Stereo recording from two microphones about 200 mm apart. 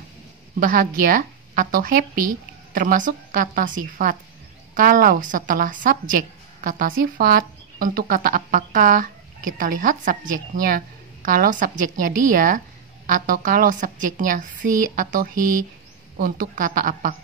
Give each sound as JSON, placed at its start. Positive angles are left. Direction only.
{"t": 0.6, "sound": "a woman's voice", "side_deg": -45}